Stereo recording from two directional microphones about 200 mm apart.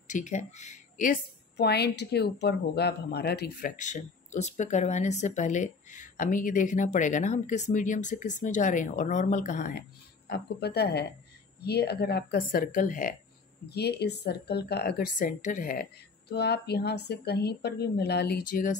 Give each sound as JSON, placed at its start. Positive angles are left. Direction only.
{"t": 0.1, "sound": "a woman's voice", "side_deg": 35}
{"t": 3.7, "sound": "a woman's voice", "side_deg": 35}
{"t": 13.7, "sound": "a woman's voice", "side_deg": 55}